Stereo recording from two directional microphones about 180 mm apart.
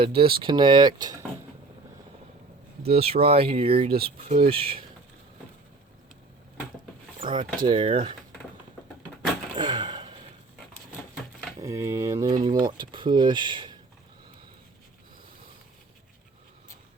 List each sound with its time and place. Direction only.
0.0 s speech: 30° right (ahead or behind)
2.8 s speech: 35° right (ahead or behind)
7.2 s speech: 50° right (ahead or behind)
7.7 s speech: 30° right (ahead or behind)
9.6 s a sound: 25° right (ahead or behind)
11.6 s speech: 15° right (ahead or behind)